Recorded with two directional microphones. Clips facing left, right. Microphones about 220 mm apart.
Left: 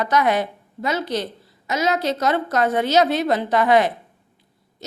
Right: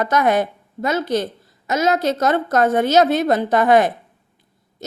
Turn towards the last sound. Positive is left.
turn(degrees=-50)  # may be behind; listen again after turning